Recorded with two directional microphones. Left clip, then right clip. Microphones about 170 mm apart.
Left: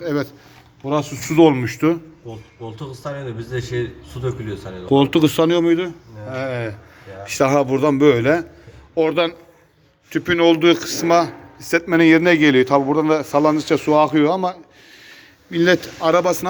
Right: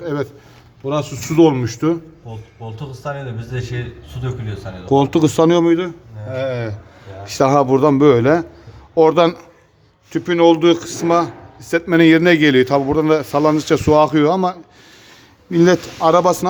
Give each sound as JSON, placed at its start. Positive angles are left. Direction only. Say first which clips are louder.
{"t": 0.0, "sound": "speech", "louder": "even", "side_deg": 0}
{"t": 4.9, "sound": "a man's voice", "louder": "right 1 dB", "side_deg": -10}
{"t": 10.1, "sound": "a man's voice", "louder": "right 3 dB", "side_deg": -15}
{"t": 11.9, "sound": "a man's voice", "louder": "right 2 dB", "side_deg": -25}
{"t": 15.4, "sound": "a man's voice", "louder": "right 3 dB", "side_deg": -20}